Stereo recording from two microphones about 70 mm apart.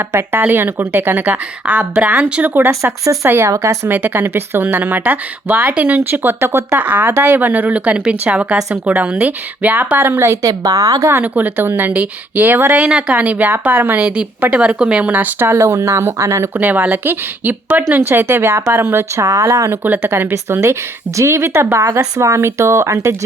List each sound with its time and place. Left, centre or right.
0.1 s a woman's voice: right
3.5 s speech: right
3.8 s a woman's voice: right
6.7 s speech: right
10.4 s a woman's voice: right
11.2 s speech: right
12.7 s a woman's voice: centre; by 16.5 s right
16.6 s a woman's voice: right
19.2 s speech: right
19.7 s a woman's voice: right